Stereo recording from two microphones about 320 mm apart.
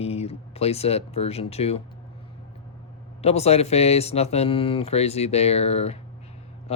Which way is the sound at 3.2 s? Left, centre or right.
Centre.